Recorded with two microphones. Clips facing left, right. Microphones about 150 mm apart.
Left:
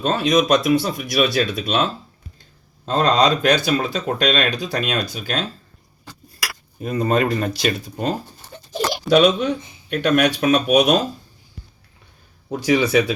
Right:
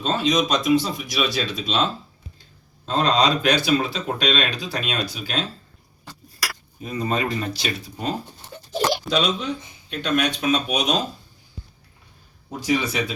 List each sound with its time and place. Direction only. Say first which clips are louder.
0.0 s speech: left 3 dB; 60° left (ahead or behind)
2.8 s speech: left 3 dB; 45° left (ahead or behind)
6.7 s speech: left 6 dB; 55° left (ahead or behind)
12.5 s a man's voice: left 5 dB; 70° left (ahead or behind)